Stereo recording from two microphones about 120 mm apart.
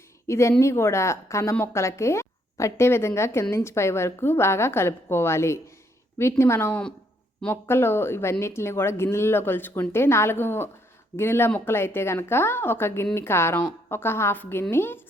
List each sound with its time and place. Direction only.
0.3 s speech: 25° left (ahead or behind)